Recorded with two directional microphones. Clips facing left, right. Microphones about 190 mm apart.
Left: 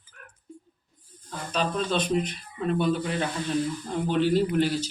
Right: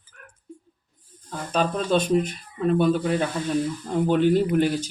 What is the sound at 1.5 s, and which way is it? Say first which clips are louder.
Speech: right 5 dB; 45° right (ahead or behind).